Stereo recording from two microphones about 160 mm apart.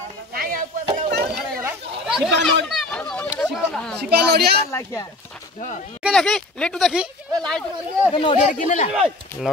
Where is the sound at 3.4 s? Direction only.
5° left (ahead or behind).